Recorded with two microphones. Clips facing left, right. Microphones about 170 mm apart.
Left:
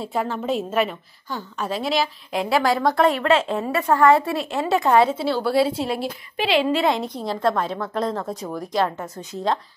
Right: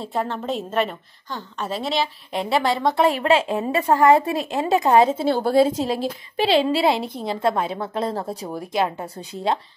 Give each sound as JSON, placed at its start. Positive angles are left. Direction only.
{"t": 0.0, "sound": "a woman's voice", "side_deg": 0}
{"t": 2.8, "sound": "a woman's voice", "side_deg": -20}
{"t": 3.1, "sound": "a woman's voice", "side_deg": -10}
{"t": 5.1, "sound": "a woman's voice", "side_deg": -45}
{"t": 7.2, "sound": "a woman's voice", "side_deg": -10}
{"t": 8.1, "sound": "a woman's voice", "side_deg": -30}
{"t": 8.7, "sound": "a woman's voice", "side_deg": -15}
{"t": 9.0, "sound": "a woman's voice", "side_deg": -30}